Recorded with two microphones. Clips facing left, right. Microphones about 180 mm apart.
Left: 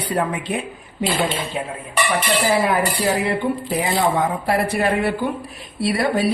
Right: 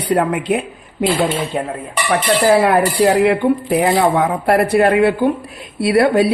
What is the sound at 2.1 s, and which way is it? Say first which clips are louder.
Speech: right 7 dB; 65° right (ahead or behind).